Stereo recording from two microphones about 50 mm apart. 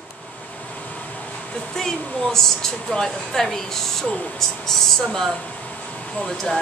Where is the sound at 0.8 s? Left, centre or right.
Left.